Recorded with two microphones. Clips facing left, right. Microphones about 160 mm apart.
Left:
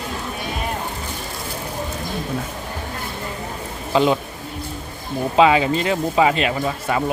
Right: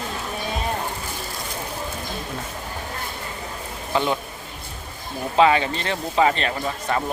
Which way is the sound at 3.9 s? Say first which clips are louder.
Left 5 dB; 15° left (ahead or behind).